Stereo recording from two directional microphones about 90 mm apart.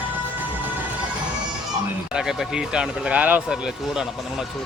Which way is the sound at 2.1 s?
5° right (ahead or behind).